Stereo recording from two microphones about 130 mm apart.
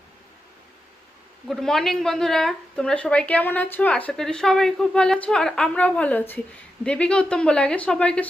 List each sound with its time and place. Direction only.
1.5 s speech: centre (ahead or behind)